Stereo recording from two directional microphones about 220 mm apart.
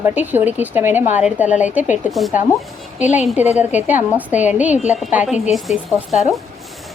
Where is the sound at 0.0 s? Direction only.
10° right (ahead or behind).